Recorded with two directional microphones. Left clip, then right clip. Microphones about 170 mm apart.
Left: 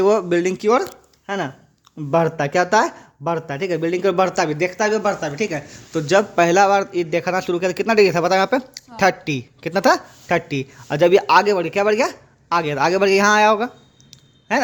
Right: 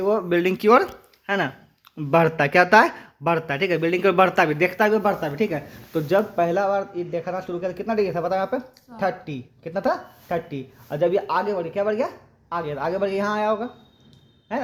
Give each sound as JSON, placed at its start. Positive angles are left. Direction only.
{"t": 0.0, "sound": "speech", "side_deg": 50}
{"t": 0.4, "sound": "speech", "side_deg": 15}
{"t": 6.3, "sound": "a man's voice", "side_deg": 55}
{"t": 14.1, "sound": "a sound", "side_deg": 60}